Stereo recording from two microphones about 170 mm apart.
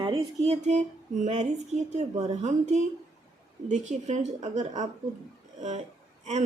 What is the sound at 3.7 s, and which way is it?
A woman's voice, 45° right (ahead or behind).